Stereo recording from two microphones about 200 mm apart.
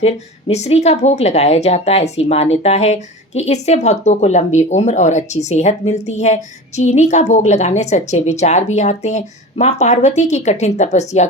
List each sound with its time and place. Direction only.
0.0 s a woman's voice: 30° left (ahead or behind)